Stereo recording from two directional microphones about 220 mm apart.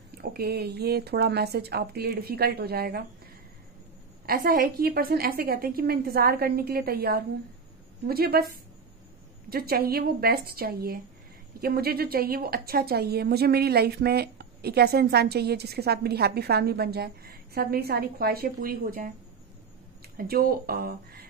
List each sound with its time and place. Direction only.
0.1 s a woman's voice: 45° right (ahead or behind)
4.3 s a woman's voice: 40° right (ahead or behind)
9.5 s a woman's voice: 45° right (ahead or behind)
20.2 s speech: 40° right (ahead or behind)